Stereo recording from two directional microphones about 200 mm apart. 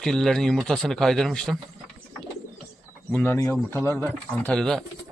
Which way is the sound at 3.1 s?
10° left (ahead or behind).